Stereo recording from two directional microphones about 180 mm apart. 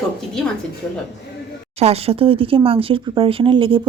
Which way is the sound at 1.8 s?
35° right (ahead or behind).